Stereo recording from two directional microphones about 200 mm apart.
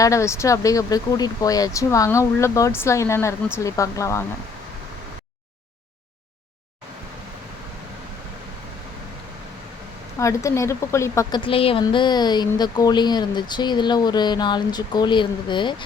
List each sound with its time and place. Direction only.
0.0 s speech: 15° left (ahead or behind)
10.2 s a woman's voice: 15° left (ahead or behind)